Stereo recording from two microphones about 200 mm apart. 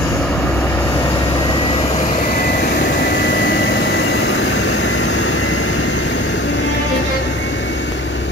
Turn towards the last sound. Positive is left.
turn(degrees=65)  # may be behind; listen again after turning